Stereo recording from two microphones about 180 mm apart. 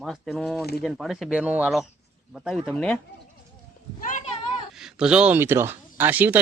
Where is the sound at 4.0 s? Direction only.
45° left (ahead or behind).